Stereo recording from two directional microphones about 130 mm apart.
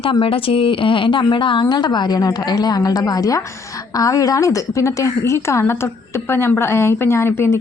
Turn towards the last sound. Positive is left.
turn(degrees=20)  # may be behind; listen again after turning